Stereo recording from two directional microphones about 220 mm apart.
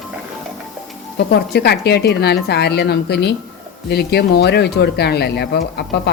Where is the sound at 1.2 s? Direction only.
45° left (ahead or behind).